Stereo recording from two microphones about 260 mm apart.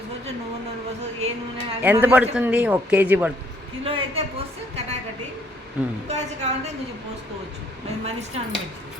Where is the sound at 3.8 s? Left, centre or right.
Right.